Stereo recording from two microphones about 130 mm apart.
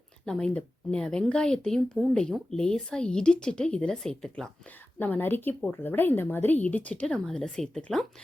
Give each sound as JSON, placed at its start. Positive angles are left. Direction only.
{"t": 0.3, "sound": "a woman's voice", "side_deg": 5}